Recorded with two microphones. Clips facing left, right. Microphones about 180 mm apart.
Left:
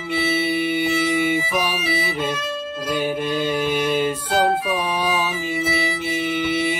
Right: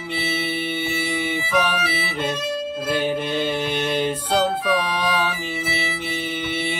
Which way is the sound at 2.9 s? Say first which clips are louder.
Left 1 dB; 5° left (ahead or behind).